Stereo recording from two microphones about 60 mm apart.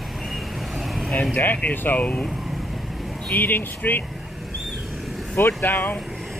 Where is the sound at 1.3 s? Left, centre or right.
Left.